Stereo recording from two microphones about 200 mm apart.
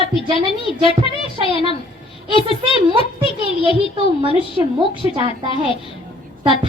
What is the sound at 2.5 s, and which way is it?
Speech, 25° right (ahead or behind).